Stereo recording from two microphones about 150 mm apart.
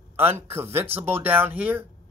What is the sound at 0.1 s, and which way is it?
Speech, 15° right (ahead or behind).